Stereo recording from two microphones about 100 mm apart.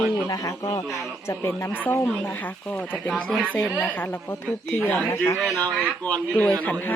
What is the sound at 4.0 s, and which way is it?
Speech, 20° left (ahead or behind).